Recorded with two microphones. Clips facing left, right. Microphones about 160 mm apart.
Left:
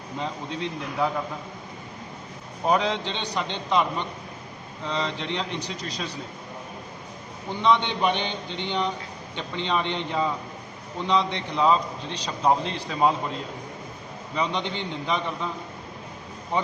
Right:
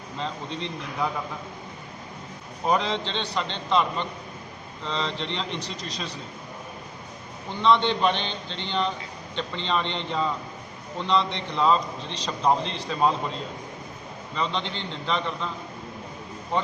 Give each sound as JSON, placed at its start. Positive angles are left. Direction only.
{"t": 0.2, "sound": "a man's voice", "side_deg": 5}
{"t": 2.6, "sound": "a man's voice", "side_deg": 10}
{"t": 4.9, "sound": "a man's voice", "side_deg": 10}
{"t": 7.6, "sound": "a man's voice", "side_deg": 10}
{"t": 14.3, "sound": "a man's voice", "side_deg": 10}